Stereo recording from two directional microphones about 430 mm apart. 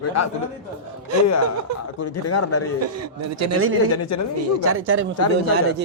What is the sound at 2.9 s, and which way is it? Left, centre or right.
Speech, right.